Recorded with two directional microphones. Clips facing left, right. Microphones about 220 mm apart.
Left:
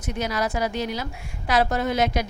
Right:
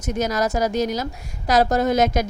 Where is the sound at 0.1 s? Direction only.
45° right (ahead or behind).